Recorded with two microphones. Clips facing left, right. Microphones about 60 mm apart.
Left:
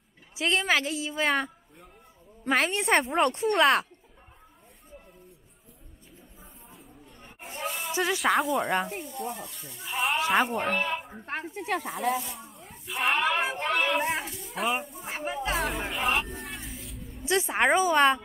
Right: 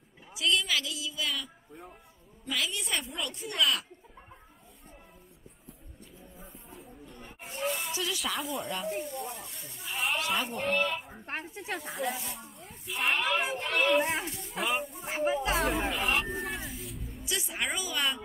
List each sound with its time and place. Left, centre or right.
0.4 s a woman's voice: left
7.5 s snake: centre
7.9 s speech: left
8.2 s speech: left
8.9 s speech: centre
11.5 s speech: left
12.1 s speech: centre
17.2 s a woman's voice: left